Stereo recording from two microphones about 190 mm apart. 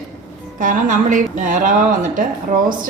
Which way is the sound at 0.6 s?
40° right (ahead or behind).